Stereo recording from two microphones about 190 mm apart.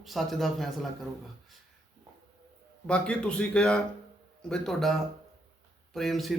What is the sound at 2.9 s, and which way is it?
Speech, 5° left (ahead or behind).